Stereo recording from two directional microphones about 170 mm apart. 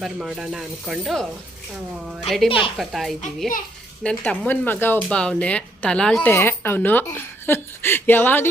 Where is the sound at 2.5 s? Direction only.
30° left (ahead or behind).